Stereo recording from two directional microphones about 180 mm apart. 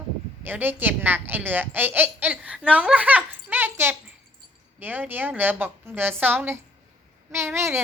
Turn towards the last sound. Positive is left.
turn(degrees=-15)  # may be behind; listen again after turning